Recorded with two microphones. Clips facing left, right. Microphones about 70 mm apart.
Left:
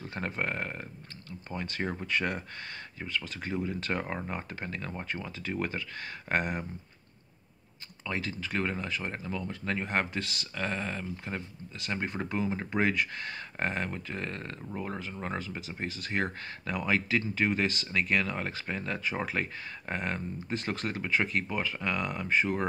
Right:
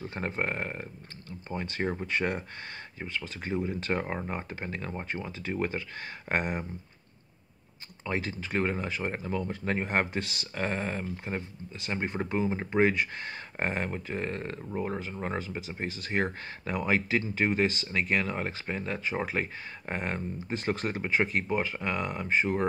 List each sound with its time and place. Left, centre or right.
0.1 s speech: centre
8.1 s speech: right